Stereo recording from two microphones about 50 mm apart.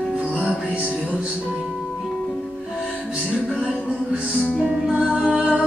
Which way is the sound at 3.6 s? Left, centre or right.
Centre.